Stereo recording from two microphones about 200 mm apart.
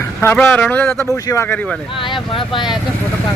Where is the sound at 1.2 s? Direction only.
15° left (ahead or behind).